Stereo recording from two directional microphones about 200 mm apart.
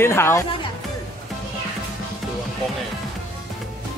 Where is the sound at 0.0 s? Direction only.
10° left (ahead or behind).